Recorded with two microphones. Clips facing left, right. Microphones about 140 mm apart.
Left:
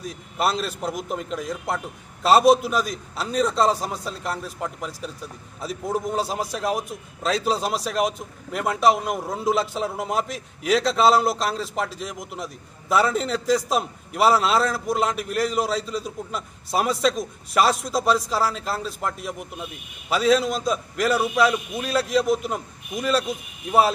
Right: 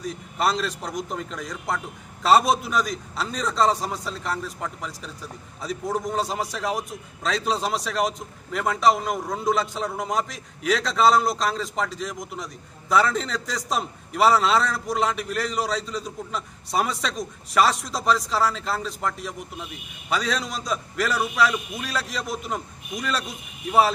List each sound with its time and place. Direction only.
0.0 s a man's voice: centre (ahead or behind)
21.1 s a man's voice: 25° left (ahead or behind)
21.7 s a man's voice: centre (ahead or behind)